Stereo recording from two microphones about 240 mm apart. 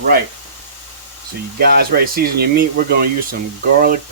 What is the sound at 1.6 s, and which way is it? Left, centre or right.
Speech, right.